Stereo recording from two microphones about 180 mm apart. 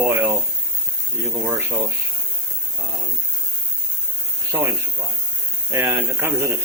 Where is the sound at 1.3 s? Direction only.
10° right (ahead or behind).